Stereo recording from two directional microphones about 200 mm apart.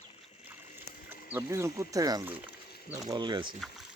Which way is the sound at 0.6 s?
35° left (ahead or behind).